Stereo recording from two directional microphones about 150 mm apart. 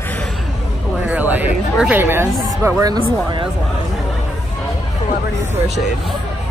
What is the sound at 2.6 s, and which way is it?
Speech, 25° right (ahead or behind).